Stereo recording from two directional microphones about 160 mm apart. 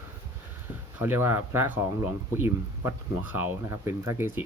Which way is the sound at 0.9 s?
15° right (ahead or behind).